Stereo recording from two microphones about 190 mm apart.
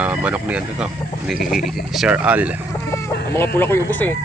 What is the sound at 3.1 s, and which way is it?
Chicken, 60° left (ahead or behind).